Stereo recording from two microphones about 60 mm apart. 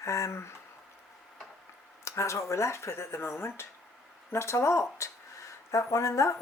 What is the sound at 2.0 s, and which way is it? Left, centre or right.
Speech, left.